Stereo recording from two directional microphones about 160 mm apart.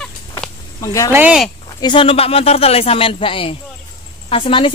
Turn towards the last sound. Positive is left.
turn(degrees=35)  # may be behind; listen again after turning